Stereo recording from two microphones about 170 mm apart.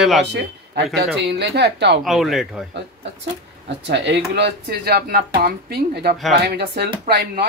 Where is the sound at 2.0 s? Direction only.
Centre (ahead or behind).